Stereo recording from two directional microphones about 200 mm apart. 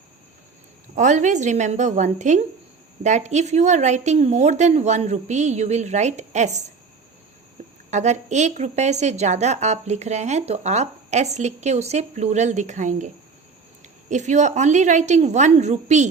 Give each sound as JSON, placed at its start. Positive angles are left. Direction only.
{"t": 0.9, "sound": "a woman's voice", "side_deg": -35}
{"t": 7.9, "sound": "a woman's voice", "side_deg": -35}
{"t": 14.1, "sound": "a woman's voice", "side_deg": -35}